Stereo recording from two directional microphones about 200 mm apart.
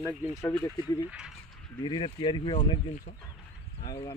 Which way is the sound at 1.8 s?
25° left (ahead or behind).